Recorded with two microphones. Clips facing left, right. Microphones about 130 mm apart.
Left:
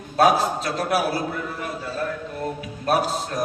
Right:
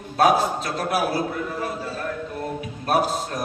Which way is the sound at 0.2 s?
45° right (ahead or behind).